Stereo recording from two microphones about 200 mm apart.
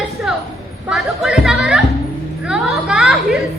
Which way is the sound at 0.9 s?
Centre (ahead or behind).